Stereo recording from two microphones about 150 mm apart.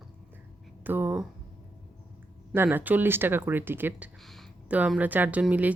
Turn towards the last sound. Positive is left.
turn(degrees=-10)  # may be behind; listen again after turning